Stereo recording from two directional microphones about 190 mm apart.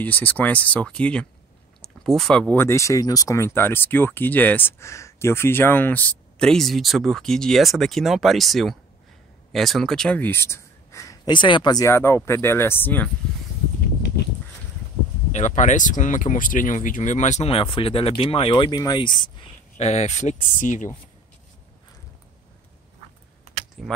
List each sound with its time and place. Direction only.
0.0 s speech: 10° left (ahead or behind)
15.3 s speech: 40° left (ahead or behind)
23.8 s speech: centre (ahead or behind)